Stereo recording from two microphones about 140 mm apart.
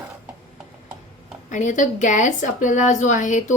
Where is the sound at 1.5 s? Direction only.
60° left (ahead or behind).